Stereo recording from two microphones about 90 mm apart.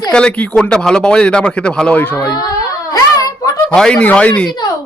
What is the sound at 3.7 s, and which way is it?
Speech, 10° left (ahead or behind).